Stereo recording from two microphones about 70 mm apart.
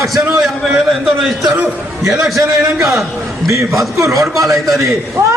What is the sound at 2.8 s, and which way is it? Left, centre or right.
Speech, centre.